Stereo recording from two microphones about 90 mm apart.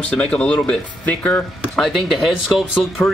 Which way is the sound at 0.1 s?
10° left (ahead or behind).